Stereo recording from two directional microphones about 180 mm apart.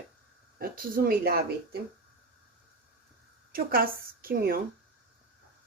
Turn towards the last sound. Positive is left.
turn(degrees=-55)  # may be behind; listen again after turning